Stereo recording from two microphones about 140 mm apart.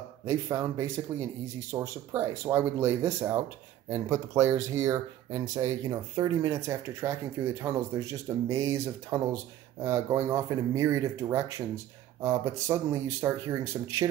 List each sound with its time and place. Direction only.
0.2 s speech: 25° right (ahead or behind)